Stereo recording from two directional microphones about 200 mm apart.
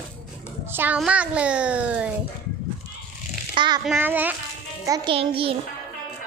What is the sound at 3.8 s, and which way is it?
Speech, 10° right (ahead or behind).